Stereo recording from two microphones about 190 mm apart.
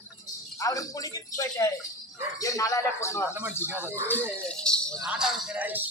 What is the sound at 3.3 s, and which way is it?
Speech, 10° right (ahead or behind).